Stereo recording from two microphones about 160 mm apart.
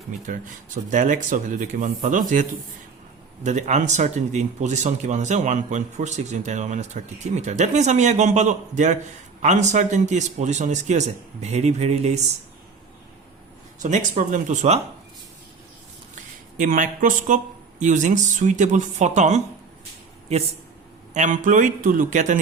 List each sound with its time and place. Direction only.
0.3 s speech: 55° right (ahead or behind)
13.8 s speech: 50° right (ahead or behind)
16.6 s speech: 55° right (ahead or behind)